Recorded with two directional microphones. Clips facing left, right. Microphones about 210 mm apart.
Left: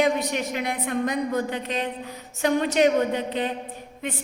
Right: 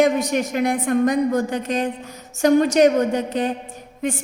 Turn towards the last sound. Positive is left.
turn(degrees=-45)  # may be behind; listen again after turning